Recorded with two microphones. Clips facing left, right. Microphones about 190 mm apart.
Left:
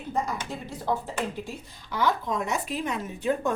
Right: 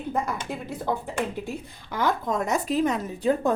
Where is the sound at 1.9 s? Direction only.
45° right (ahead or behind).